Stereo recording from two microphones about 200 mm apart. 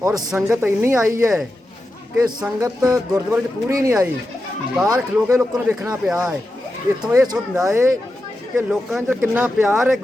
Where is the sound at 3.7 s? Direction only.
15° right (ahead or behind).